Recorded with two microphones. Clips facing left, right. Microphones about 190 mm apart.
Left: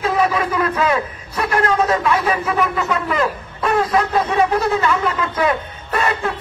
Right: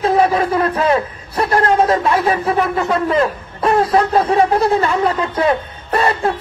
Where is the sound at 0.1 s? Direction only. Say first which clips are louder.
Right 5 dB; 35° right (ahead or behind).